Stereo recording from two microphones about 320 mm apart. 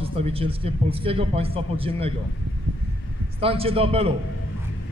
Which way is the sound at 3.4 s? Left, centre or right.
Centre.